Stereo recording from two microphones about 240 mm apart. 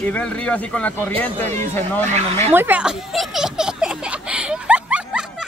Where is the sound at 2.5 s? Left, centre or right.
Centre.